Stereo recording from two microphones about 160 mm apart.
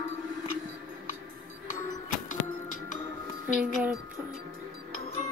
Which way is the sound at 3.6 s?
5° right (ahead or behind).